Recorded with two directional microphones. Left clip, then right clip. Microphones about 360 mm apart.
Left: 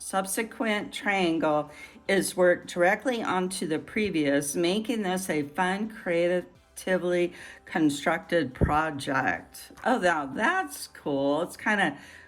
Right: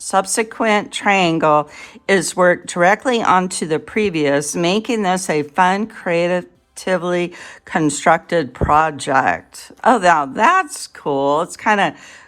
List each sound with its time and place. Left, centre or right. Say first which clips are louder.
0.1 s speech: right 12 dB; centre